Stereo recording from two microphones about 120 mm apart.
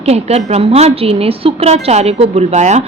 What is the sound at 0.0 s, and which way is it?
A woman's voice, 60° right (ahead or behind).